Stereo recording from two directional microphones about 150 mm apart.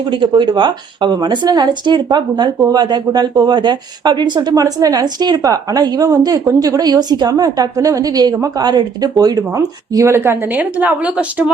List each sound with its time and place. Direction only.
0.1 s a woman's voice: 30° right (ahead or behind); by 11.5 s 10° right (ahead or behind)